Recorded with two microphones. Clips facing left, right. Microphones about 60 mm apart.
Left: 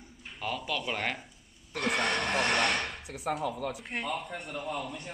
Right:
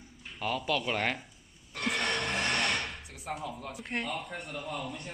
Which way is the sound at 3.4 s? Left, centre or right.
Left.